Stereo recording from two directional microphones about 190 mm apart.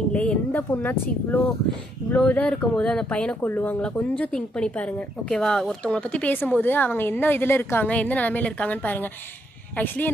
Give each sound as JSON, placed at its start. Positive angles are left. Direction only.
{"t": 0.1, "sound": "a woman's voice", "side_deg": 5}